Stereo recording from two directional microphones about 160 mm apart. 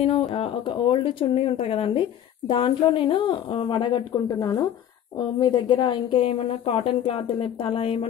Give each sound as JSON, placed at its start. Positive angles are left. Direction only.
{"t": 0.0, "sound": "speech", "side_deg": 45}
{"t": 0.4, "sound": "speech", "side_deg": 35}